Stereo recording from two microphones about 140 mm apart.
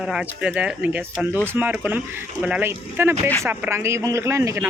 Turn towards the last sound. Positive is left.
turn(degrees=-20)  # may be behind; listen again after turning